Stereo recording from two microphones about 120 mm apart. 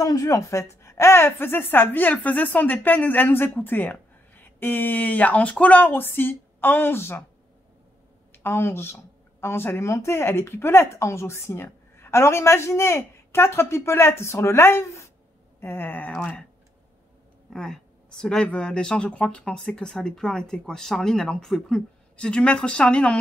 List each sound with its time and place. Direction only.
0.0 s a woman's voice: 30° left (ahead or behind)
8.3 s a woman's voice: 20° left (ahead or behind)
17.5 s a woman's voice: 5° left (ahead or behind)